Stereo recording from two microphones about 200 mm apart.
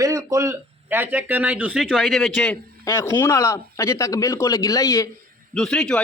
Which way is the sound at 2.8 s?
15° left (ahead or behind).